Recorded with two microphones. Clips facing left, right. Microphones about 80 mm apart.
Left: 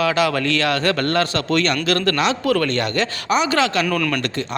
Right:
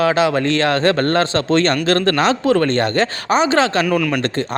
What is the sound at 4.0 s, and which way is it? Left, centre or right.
Speech, centre.